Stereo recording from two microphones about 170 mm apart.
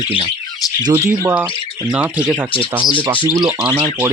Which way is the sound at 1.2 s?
10° right (ahead or behind).